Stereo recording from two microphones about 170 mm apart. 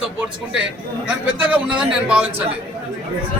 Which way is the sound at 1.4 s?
5° right (ahead or behind).